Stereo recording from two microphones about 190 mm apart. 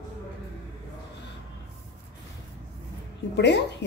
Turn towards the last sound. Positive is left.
turn(degrees=65)  # may be behind; listen again after turning